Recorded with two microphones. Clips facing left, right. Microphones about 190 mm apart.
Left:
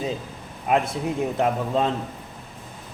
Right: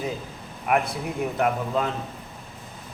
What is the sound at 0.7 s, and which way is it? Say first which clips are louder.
A man's voice: left 2 dB; 25° left (ahead or behind).